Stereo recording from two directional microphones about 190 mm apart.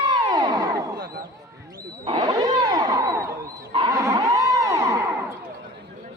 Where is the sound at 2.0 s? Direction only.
25° right (ahead or behind).